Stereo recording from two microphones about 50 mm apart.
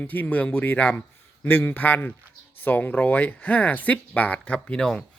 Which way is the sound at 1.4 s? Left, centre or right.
Left.